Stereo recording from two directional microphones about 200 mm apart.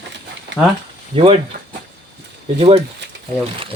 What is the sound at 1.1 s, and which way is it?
Speech, 30° right (ahead or behind).